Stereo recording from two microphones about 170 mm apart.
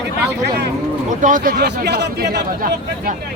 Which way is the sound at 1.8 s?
80° right.